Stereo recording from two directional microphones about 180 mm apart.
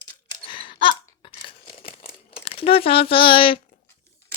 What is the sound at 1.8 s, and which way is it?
Crumpling, 55° left (ahead or behind).